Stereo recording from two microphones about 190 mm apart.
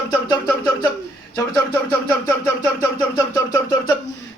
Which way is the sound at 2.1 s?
15° left (ahead or behind).